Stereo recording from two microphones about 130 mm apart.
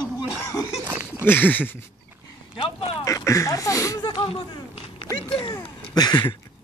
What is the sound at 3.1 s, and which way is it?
Speech, 25° left (ahead or behind).